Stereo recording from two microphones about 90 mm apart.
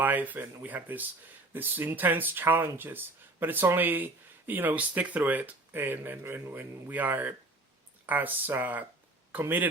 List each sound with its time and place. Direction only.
0.0 s speech: 20° right (ahead or behind)